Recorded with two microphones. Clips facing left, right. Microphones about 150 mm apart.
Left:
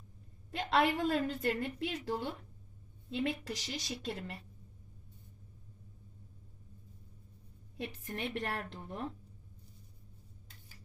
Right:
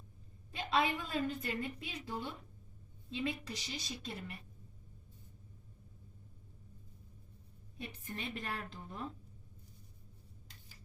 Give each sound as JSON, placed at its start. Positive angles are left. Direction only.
{"t": 0.5, "sound": "a woman's voice", "side_deg": 75}
{"t": 3.1, "sound": "a woman's voice", "side_deg": 75}
{"t": 7.8, "sound": "a woman's voice", "side_deg": 80}